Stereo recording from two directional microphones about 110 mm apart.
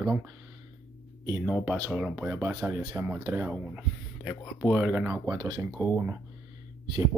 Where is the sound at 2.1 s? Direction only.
20° right (ahead or behind).